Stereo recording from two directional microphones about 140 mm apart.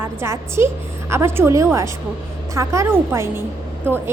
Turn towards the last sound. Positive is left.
turn(degrees=-15)  # may be behind; listen again after turning